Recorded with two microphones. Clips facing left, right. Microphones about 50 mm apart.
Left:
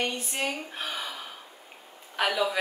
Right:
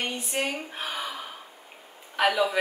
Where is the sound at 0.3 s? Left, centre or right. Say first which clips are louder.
Right 3 dB; centre.